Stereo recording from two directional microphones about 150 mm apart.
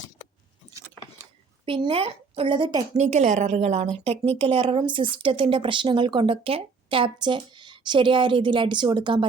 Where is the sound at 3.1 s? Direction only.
50° right (ahead or behind).